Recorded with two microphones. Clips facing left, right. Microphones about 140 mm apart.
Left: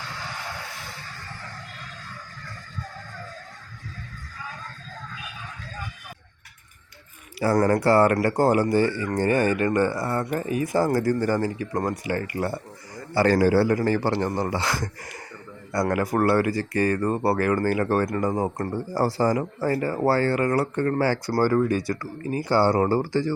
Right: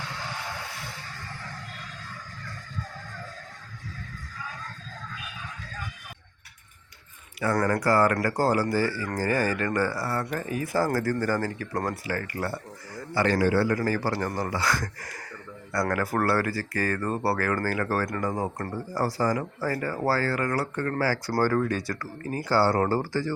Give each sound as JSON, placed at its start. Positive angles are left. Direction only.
{"t": 7.3, "sound": "speech", "side_deg": 30}
{"t": 13.1, "sound": "speech", "side_deg": 35}